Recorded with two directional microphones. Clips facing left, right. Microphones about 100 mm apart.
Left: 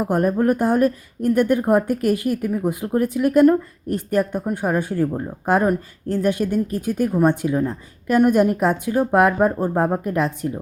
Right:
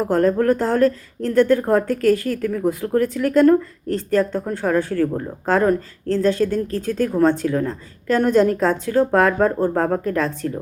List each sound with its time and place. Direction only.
0.0 s speech: 15° left (ahead or behind)